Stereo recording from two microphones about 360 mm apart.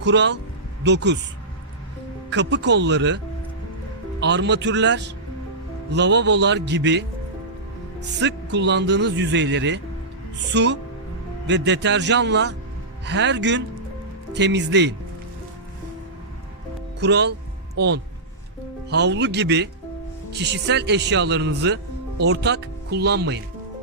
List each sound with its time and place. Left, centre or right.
0.0 s speech: right
2.3 s speech: right
4.2 s speech: right
8.2 s speech: right
17.0 s speech: right